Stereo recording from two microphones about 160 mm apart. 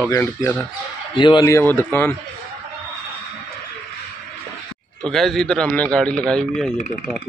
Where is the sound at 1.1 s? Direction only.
25° left (ahead or behind); by 2.2 s 10° left (ahead or behind).